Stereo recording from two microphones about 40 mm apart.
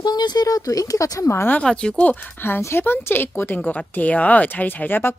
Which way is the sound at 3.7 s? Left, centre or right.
Left.